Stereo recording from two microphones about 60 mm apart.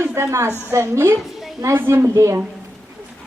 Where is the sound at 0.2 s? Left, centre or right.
Right.